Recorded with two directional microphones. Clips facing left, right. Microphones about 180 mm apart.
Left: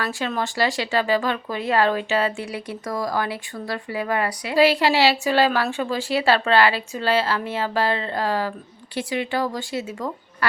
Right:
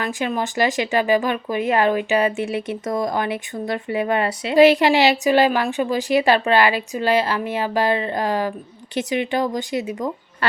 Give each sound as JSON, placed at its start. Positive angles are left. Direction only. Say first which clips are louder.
{"t": 0.0, "sound": "speech", "louder": "right 2 dB", "side_deg": -15}